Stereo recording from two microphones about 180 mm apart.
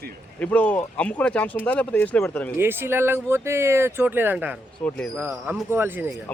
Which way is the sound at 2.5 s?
10° right (ahead or behind).